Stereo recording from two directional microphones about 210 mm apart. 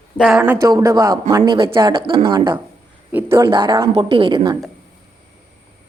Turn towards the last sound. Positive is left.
turn(degrees=-25)  # may be behind; listen again after turning